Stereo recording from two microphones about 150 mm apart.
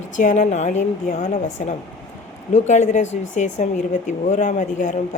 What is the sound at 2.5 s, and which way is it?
Speech, 50° left (ahead or behind).